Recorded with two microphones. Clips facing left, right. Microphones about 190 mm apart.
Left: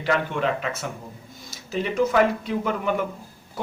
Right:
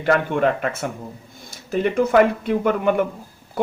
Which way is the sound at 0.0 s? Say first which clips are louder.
Right 5 dB; 50° right (ahead or behind).